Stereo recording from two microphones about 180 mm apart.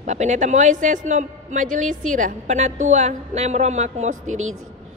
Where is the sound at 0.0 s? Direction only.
40° right (ahead or behind).